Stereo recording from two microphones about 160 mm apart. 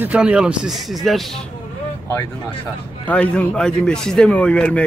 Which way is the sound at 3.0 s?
5° left (ahead or behind).